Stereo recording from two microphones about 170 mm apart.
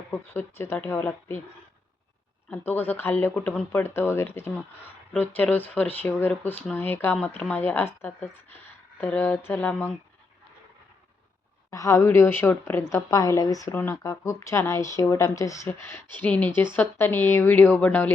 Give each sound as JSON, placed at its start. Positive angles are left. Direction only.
{"t": 0.1, "sound": "speech", "side_deg": 10}
{"t": 2.5, "sound": "speech", "side_deg": 10}
{"t": 11.7, "sound": "speech", "side_deg": 20}